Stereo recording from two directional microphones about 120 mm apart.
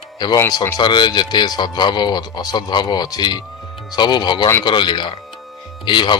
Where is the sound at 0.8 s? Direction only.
40° left (ahead or behind).